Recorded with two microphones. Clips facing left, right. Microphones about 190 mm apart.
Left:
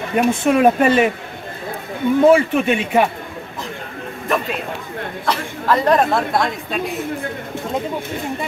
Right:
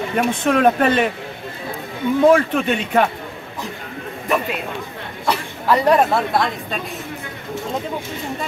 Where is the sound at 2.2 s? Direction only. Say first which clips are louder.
Left 1 dB; 10° left (ahead or behind).